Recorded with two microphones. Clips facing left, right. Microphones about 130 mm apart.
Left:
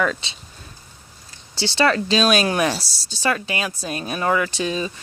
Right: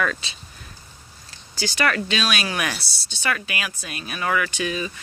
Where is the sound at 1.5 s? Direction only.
30° left (ahead or behind).